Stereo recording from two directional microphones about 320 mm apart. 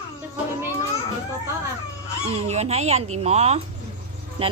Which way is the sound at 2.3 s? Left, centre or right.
Centre.